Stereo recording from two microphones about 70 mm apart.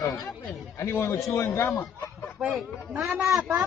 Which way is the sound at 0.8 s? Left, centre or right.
Left.